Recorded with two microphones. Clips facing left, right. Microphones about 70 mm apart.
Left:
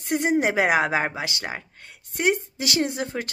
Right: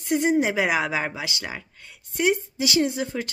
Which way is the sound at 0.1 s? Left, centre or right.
Left.